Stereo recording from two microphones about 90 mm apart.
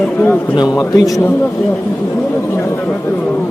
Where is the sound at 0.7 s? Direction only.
40° left (ahead or behind).